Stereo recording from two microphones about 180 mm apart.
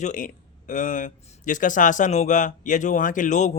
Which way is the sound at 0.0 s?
45° left (ahead or behind).